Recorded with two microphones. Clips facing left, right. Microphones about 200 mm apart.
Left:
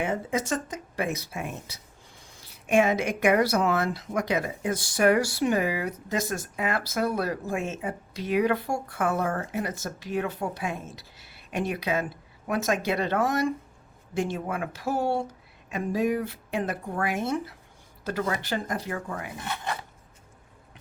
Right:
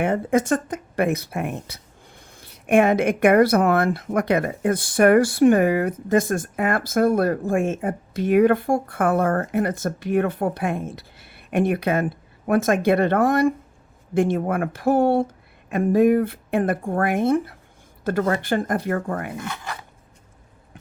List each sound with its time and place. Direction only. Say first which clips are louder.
0.0 s speech: right 8 dB; 55° right (ahead or behind)